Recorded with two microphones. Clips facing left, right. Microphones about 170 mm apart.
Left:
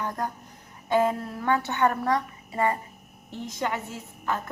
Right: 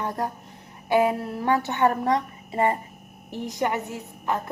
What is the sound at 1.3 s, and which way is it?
A woman's voice, 30° right (ahead or behind).